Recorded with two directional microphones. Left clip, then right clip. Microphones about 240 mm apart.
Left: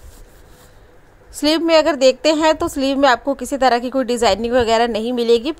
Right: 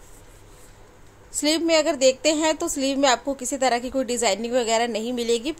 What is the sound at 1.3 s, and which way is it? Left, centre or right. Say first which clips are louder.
A woman's voice: left 6 dB; centre.